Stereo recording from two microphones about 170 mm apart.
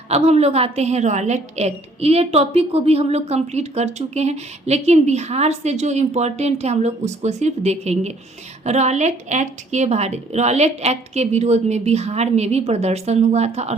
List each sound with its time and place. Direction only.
0.1 s a woman's voice: 40° right (ahead or behind)